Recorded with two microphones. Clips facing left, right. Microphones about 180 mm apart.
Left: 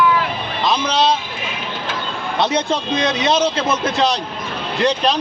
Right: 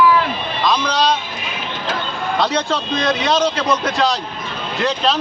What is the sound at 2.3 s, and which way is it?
A man's voice, 20° left (ahead or behind).